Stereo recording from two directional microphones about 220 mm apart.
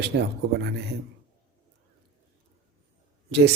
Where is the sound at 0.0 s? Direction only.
50° right (ahead or behind).